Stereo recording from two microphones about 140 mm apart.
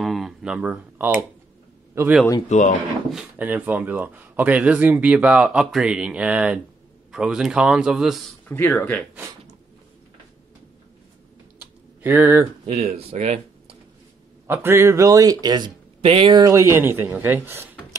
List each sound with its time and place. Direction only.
0.0 s speech: centre (ahead or behind); by 2.1 s 20° right (ahead or behind)
2.5 s speech: 60° left (ahead or behind)
3.1 s a man's voice: 5° right (ahead or behind)
8.5 s speech: 15° left (ahead or behind)
12.0 s speech: 15° right (ahead or behind)
12.6 s speech: 50° right (ahead or behind)
14.5 s speech: 15° right (ahead or behind)